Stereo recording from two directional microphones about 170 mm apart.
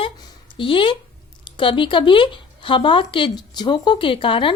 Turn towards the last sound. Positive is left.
turn(degrees=30)  # may be behind; listen again after turning